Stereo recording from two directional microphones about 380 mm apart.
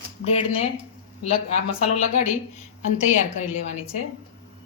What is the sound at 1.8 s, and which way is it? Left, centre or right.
Speech, centre.